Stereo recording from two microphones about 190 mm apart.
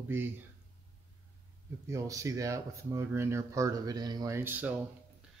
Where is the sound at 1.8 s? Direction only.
15° right (ahead or behind).